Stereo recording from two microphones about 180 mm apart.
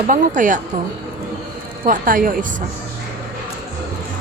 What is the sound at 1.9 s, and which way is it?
Speech, 50° right (ahead or behind).